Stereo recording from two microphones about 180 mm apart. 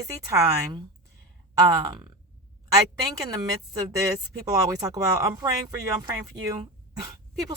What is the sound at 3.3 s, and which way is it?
Speech, 20° right (ahead or behind).